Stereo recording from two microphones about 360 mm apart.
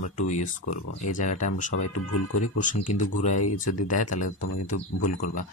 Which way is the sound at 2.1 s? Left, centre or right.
Left.